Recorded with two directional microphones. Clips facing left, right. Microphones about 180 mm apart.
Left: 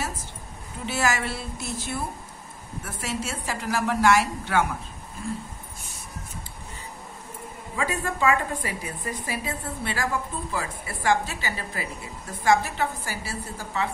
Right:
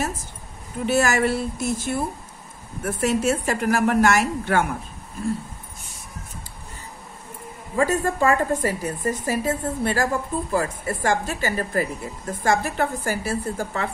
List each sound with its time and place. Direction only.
0.8 s a woman's voice: 50° right (ahead or behind)
7.7 s a woman's voice: 45° right (ahead or behind)